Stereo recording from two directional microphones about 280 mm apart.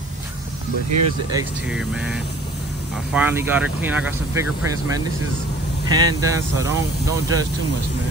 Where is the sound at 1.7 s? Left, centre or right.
Centre.